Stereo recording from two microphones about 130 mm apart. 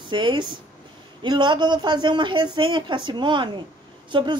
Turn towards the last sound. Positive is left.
turn(degrees=-35)  # may be behind; listen again after turning